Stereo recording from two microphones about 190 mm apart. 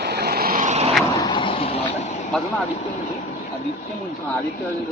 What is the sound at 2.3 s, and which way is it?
Vehicle, 5° left (ahead or behind).